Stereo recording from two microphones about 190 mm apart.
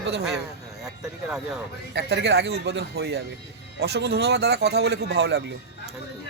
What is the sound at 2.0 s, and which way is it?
Speech, 60° right (ahead or behind).